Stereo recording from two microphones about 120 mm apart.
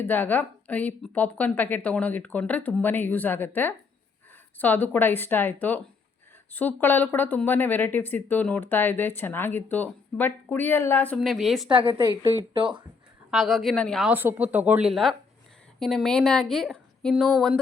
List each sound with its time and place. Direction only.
0.0 s speech: 15° left (ahead or behind)
11.2 s speech: centre (ahead or behind)
11.7 s speech: 45° right (ahead or behind)
13.3 s speech: centre (ahead or behind)
14.1 s speech: 15° right (ahead or behind); by 17.6 s centre (ahead or behind)